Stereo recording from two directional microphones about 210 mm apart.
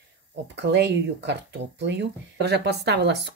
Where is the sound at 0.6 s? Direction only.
55° right (ahead or behind).